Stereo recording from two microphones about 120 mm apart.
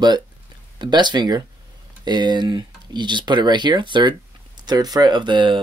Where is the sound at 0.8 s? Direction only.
40° right (ahead or behind).